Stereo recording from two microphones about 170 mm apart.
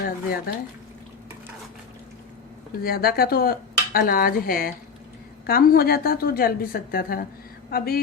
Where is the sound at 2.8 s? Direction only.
65° left (ahead or behind).